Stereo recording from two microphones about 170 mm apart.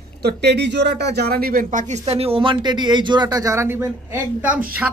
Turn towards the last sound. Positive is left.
turn(degrees=-10)  # may be behind; listen again after turning